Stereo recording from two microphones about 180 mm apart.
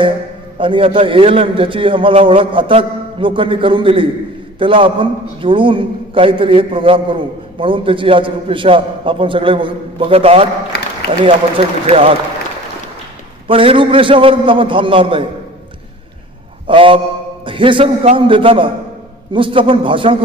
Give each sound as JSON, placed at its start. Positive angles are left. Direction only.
{"t": 0.6, "sound": "a man's voice", "side_deg": -30}
{"t": 10.7, "sound": "a sound", "side_deg": 65}
{"t": 11.2, "sound": "a man's voice", "side_deg": -30}
{"t": 13.5, "sound": "a man's voice", "side_deg": -30}
{"t": 16.6, "sound": "a man's voice", "side_deg": -30}